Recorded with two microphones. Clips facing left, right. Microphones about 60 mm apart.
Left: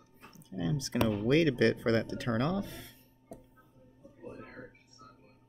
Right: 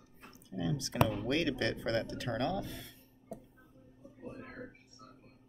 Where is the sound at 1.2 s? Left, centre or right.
Left.